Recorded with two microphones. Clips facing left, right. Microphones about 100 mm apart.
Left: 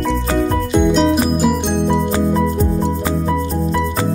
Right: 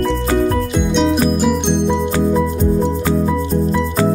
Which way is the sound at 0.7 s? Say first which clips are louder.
Left 2 dB; 5° left (ahead or behind).